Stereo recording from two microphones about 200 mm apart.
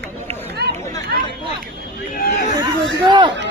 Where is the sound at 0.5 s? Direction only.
55° right (ahead or behind).